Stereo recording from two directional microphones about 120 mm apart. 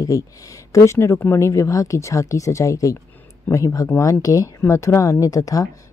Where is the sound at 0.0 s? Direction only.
30° left (ahead or behind).